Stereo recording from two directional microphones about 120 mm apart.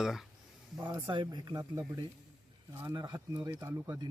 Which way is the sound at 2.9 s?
30° right (ahead or behind).